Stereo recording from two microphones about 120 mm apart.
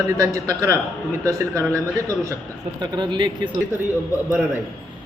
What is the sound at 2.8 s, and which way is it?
Speech, 40° right (ahead or behind).